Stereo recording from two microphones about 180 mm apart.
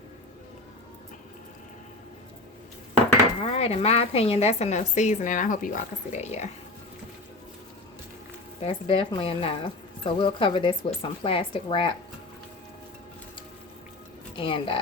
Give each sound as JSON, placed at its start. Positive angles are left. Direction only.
{"t": 3.4, "sound": "a woman's voice", "side_deg": 35}
{"t": 8.6, "sound": "speech", "side_deg": 30}
{"t": 14.3, "sound": "speech", "side_deg": 30}